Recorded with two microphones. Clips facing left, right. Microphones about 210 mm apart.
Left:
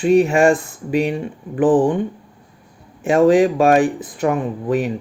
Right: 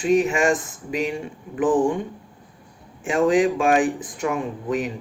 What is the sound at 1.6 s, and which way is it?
Speech, 35° left (ahead or behind).